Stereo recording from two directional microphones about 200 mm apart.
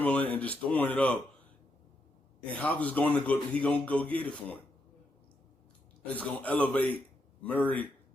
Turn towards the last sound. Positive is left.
turn(degrees=10)  # may be behind; listen again after turning